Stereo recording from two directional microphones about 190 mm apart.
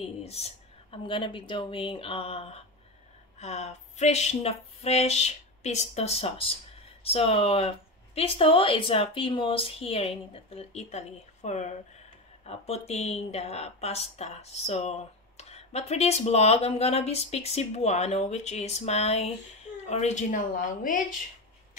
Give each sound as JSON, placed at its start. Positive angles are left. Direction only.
{"t": 0.2, "sound": "speech", "side_deg": 35}